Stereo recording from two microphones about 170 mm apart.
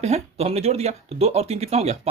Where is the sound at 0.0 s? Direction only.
40° right (ahead or behind).